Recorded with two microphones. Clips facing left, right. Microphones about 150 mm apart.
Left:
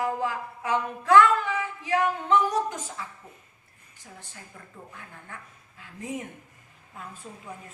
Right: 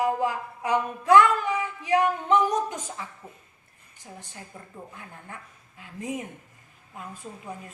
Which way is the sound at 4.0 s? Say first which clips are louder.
Right 3 dB; 20° right (ahead or behind).